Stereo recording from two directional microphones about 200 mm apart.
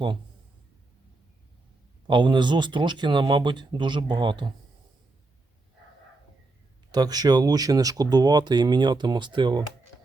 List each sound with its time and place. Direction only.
2.0 s speech: 25° right (ahead or behind)
6.9 s speech: 20° right (ahead or behind)